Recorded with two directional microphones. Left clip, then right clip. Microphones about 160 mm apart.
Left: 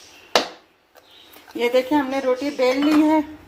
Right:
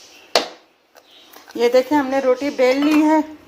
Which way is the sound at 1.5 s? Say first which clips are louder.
Right 4 dB; 25° right (ahead or behind).